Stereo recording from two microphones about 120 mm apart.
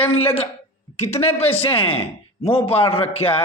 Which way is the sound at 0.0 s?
55° left (ahead or behind).